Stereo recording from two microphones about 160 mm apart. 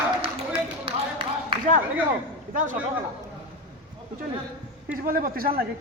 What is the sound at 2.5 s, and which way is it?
Speech, 55° right (ahead or behind).